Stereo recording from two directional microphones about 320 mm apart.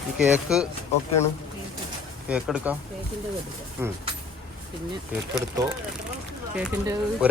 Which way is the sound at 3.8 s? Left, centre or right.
Centre.